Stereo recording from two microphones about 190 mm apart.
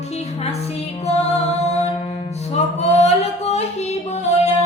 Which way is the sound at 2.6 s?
35° left (ahead or behind).